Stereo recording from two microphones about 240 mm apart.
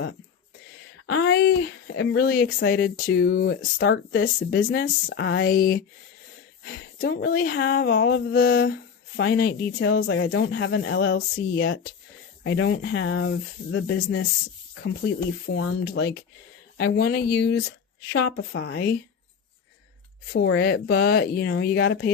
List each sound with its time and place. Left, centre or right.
1.0 s speech: left
15.5 s speech: left
20.3 s speech: left